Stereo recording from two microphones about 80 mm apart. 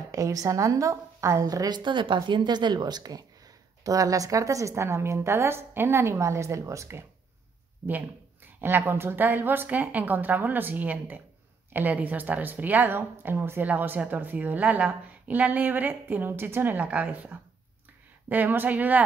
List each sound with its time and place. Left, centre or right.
0.1 s a woman's voice: right
1.8 s a woman's voice: right
8.5 s a woman's voice: right